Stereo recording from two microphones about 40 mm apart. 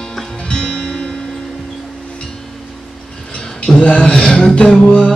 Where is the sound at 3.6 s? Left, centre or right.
Left.